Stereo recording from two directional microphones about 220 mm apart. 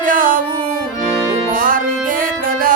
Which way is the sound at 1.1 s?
15° right (ahead or behind).